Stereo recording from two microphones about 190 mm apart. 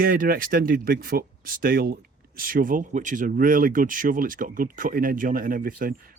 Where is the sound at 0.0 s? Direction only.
50° right (ahead or behind).